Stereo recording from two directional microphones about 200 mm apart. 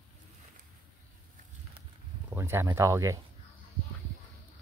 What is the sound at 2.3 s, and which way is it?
Speech, 10° right (ahead or behind).